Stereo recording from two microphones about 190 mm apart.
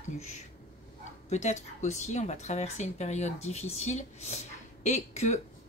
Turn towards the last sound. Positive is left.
turn(degrees=35)  # may be behind; listen again after turning